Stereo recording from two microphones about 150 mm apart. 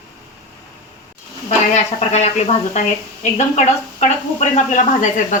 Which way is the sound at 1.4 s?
50° left (ahead or behind).